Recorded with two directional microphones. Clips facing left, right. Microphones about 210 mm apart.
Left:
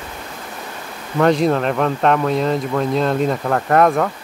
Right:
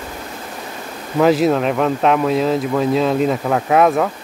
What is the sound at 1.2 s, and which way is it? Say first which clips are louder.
Speech: right 1 dB; 5° right (ahead or behind).